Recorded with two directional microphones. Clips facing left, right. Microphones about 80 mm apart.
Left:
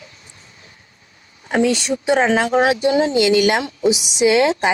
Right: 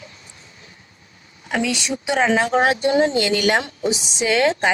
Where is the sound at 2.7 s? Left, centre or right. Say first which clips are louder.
Left 1 dB; right.